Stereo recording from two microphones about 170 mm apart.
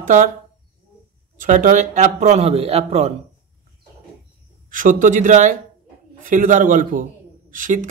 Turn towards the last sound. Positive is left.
turn(degrees=-50)  # may be behind; listen again after turning